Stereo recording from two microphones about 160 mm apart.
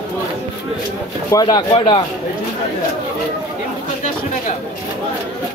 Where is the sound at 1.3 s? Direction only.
30° left (ahead or behind).